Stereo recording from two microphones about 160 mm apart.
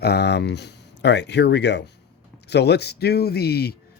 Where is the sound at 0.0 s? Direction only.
90° left.